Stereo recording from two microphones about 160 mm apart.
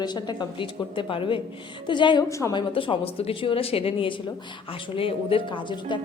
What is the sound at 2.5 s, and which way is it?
A woman's voice, 30° left (ahead or behind).